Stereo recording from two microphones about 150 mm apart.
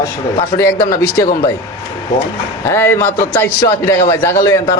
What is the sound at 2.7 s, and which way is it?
A man's voice, 15° left (ahead or behind).